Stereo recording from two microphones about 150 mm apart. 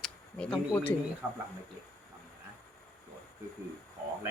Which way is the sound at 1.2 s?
10° right (ahead or behind).